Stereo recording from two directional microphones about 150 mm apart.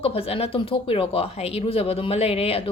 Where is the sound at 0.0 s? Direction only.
40° left (ahead or behind).